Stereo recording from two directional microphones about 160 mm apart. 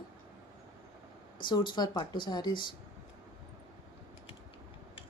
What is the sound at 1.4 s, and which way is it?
Speech, 30° left (ahead or behind).